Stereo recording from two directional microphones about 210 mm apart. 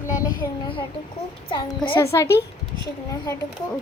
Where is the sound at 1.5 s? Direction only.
20° left (ahead or behind).